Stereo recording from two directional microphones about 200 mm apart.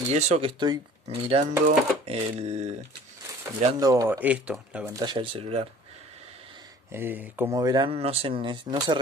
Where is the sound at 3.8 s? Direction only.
15° right (ahead or behind).